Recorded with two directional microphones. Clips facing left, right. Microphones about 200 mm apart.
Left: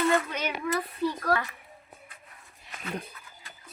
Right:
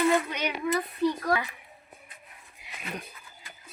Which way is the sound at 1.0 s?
15° right (ahead or behind).